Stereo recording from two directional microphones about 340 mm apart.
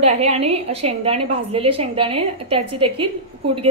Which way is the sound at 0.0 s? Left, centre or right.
Centre.